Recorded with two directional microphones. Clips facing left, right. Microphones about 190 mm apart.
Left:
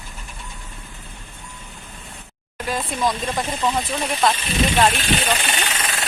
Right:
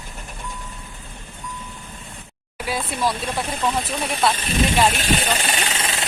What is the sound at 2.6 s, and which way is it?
Speech, 5° right (ahead or behind).